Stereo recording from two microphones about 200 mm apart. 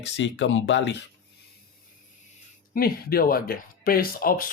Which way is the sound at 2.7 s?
50° left (ahead or behind).